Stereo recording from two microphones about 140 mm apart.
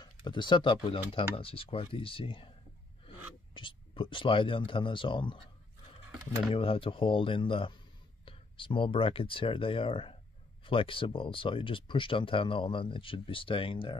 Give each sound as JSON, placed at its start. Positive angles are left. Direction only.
{"t": 0.0, "sound": "speech", "side_deg": 35}
{"t": 3.5, "sound": "speech", "side_deg": 35}
{"t": 6.5, "sound": "speech", "side_deg": 40}